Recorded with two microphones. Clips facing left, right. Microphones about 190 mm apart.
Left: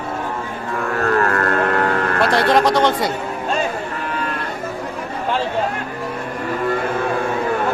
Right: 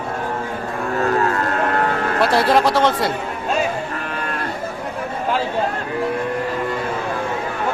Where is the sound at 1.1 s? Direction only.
60° left (ahead or behind).